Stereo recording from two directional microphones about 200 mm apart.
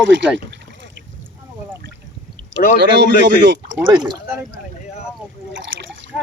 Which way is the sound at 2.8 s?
60° right (ahead or behind).